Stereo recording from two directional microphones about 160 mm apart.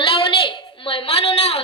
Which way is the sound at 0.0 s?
35° left (ahead or behind).